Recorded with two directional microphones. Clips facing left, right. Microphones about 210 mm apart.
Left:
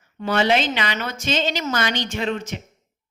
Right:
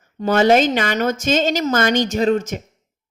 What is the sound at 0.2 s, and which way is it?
A woman's voice, 45° right (ahead or behind).